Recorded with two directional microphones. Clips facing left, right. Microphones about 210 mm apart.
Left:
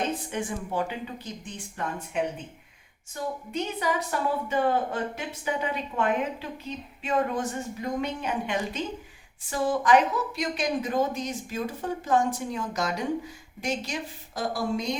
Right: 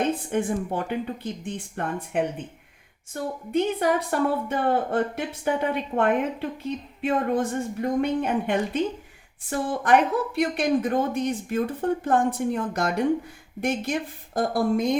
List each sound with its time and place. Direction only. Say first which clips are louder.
0.3 s a woman's voice: right 6 dB; 55° right (ahead or behind)
3.1 s a woman's voice: right 6 dB; 55° right (ahead or behind)